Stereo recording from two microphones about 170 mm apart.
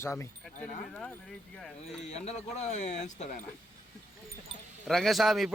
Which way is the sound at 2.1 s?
40° left (ahead or behind).